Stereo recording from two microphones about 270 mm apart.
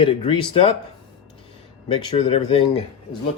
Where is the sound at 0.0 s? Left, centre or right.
Centre.